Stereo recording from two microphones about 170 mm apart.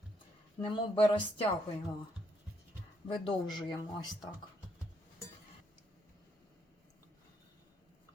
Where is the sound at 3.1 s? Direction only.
30° left (ahead or behind).